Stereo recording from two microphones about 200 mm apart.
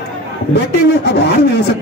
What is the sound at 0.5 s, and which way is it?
Speech, 55° left (ahead or behind).